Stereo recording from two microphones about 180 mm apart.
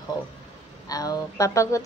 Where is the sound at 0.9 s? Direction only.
20° left (ahead or behind).